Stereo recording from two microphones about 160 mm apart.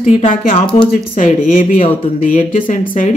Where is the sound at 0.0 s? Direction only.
50° left (ahead or behind).